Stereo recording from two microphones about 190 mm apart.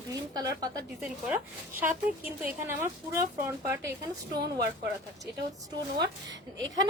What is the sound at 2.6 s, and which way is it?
Speech, 15° right (ahead or behind).